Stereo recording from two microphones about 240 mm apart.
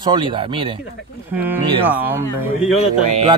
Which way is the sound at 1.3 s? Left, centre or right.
Centre.